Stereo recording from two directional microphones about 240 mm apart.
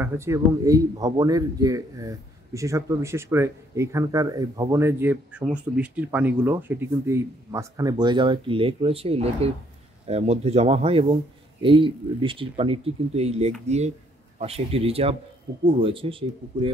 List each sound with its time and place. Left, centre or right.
0.0 s speech: centre